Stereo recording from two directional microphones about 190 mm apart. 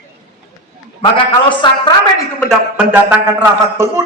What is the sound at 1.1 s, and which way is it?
A man's voice, 25° left (ahead or behind).